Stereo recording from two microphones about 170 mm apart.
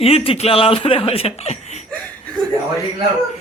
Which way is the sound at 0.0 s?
35° left (ahead or behind).